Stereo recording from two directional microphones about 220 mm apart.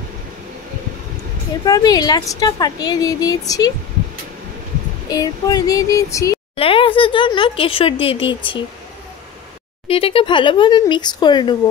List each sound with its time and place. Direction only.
1.7 s a woman's voice: 15° left (ahead or behind)
5.1 s a woman's voice: 15° left (ahead or behind)
6.5 s a sound: 25° left (ahead or behind)
9.8 s speech: 25° left (ahead or behind)